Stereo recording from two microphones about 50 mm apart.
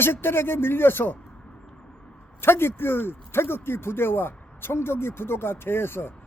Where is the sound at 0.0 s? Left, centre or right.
Left.